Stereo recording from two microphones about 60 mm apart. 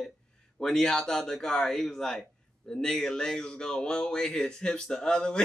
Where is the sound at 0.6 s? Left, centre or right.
Centre.